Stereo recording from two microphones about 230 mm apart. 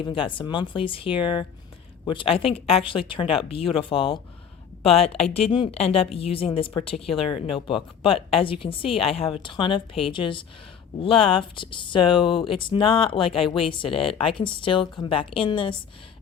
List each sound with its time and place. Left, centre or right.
0.0 s speech: left